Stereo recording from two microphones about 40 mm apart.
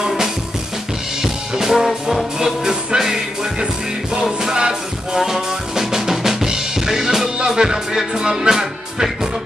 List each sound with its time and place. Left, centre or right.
1.2 s drum: centre
2.3 s music: centre
5.2 s drum kit: centre
7.3 s music: centre